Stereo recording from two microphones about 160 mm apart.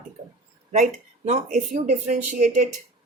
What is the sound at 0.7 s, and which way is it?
Speech, 45° right (ahead or behind).